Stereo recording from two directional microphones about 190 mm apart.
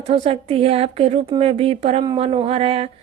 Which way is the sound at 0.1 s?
30° right (ahead or behind).